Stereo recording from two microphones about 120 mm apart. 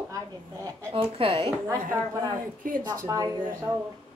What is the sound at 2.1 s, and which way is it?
A woman's voice, 30° right (ahead or behind).